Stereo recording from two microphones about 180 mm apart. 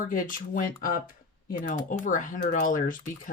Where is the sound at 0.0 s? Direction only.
50° left (ahead or behind).